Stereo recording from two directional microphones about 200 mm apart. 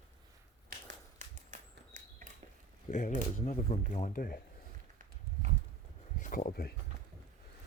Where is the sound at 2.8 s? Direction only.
40° left (ahead or behind).